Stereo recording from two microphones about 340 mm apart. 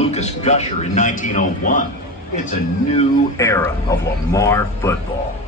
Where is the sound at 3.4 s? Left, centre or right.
Centre.